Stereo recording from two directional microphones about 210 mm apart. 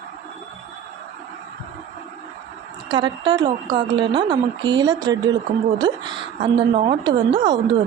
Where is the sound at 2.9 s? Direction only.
20° right (ahead or behind).